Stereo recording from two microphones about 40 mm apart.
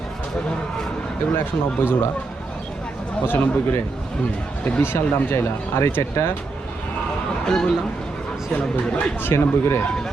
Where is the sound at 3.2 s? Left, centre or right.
Left.